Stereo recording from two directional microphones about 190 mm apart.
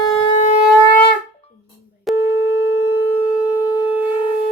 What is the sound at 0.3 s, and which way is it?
Shofar, 40° left (ahead or behind).